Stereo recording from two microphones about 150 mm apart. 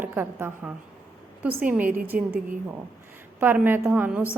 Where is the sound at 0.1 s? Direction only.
15° right (ahead or behind).